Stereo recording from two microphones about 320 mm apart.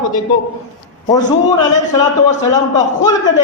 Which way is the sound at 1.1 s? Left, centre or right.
Centre.